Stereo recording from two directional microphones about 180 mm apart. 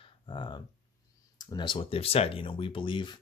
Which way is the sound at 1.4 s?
25° left (ahead or behind).